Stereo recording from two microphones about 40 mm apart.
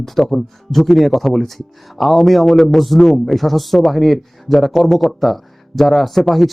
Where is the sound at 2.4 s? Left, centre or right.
Centre.